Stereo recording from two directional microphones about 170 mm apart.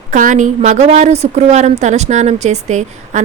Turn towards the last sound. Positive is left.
turn(degrees=-40)  # may be behind; listen again after turning